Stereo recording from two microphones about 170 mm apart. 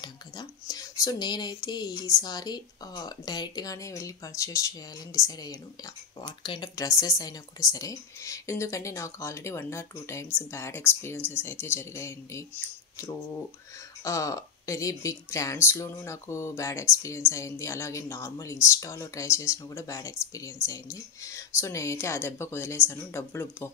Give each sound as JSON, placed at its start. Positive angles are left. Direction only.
{"t": 0.0, "sound": "speech", "side_deg": 25}